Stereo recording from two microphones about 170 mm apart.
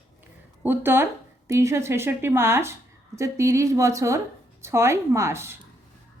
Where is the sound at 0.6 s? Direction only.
10° right (ahead or behind).